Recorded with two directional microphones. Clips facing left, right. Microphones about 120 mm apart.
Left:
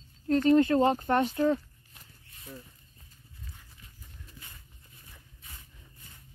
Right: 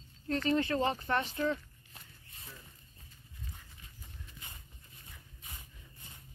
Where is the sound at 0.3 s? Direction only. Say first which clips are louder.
Left 9 dB; 40° left (ahead or behind).